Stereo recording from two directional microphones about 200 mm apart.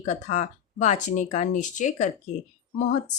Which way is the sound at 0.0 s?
35° left (ahead or behind).